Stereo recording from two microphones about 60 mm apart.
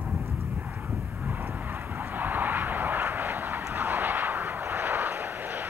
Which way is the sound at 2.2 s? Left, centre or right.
Right.